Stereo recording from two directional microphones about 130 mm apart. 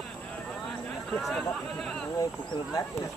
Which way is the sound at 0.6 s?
5° left (ahead or behind).